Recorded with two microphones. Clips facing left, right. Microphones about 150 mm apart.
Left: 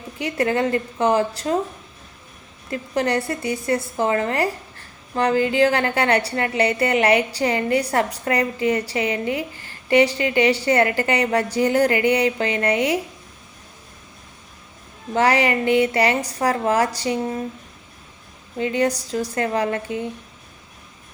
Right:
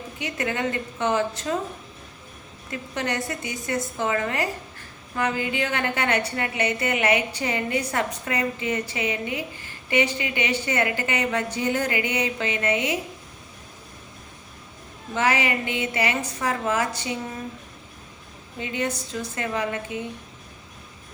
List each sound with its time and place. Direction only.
0.2 s a woman's voice: 35° left (ahead or behind)
2.6 s a woman's voice: 35° left (ahead or behind)
15.1 s a woman's voice: 40° left (ahead or behind)
18.6 s a woman's voice: 40° left (ahead or behind)